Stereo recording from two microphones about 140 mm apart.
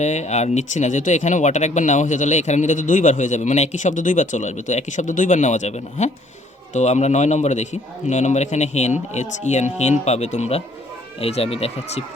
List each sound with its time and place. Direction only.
0.0 s speech: 55° left (ahead or behind)